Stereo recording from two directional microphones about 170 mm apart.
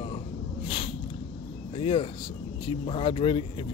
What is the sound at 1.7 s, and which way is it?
Speech, 30° left (ahead or behind).